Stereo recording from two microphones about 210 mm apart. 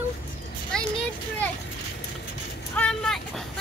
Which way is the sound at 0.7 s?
5° left (ahead or behind).